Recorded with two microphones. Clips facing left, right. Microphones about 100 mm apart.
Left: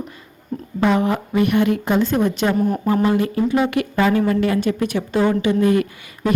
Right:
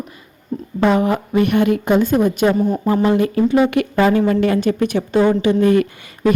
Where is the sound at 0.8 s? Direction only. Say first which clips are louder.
Right 2 dB; 20° right (ahead or behind).